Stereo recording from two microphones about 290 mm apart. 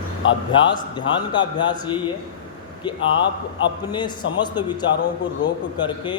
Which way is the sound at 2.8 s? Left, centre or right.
Centre.